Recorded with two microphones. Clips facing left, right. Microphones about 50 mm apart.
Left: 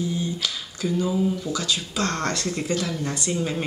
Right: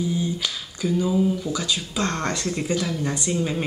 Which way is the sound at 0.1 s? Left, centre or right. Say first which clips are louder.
Right 2 dB; centre.